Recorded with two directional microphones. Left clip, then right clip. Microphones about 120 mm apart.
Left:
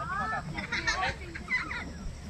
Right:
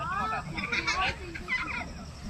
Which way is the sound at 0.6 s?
15° right (ahead or behind).